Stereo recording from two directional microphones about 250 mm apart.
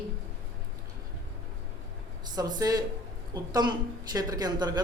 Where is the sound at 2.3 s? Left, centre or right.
Centre.